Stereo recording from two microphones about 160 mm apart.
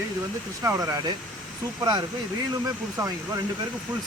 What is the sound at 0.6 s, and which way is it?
Speech, 20° right (ahead or behind).